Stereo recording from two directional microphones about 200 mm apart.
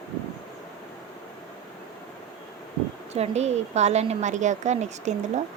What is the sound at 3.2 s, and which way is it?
A woman's voice, 35° right (ahead or behind).